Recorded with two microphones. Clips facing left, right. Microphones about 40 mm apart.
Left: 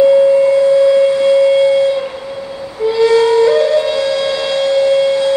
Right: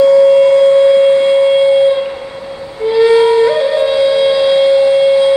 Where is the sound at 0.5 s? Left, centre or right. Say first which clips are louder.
Right 2 dB; right.